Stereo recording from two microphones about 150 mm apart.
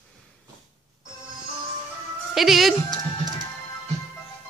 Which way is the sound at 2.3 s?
Centre (ahead or behind).